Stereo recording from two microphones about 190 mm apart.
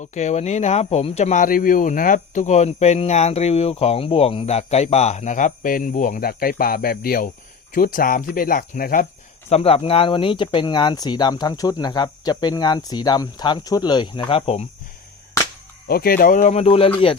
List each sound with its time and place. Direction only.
0.0 s speech: 40° left (ahead or behind)
9.5 s speech: 35° left (ahead or behind)
15.9 s speech: 50° left (ahead or behind); by 16.9 s 30° left (ahead or behind)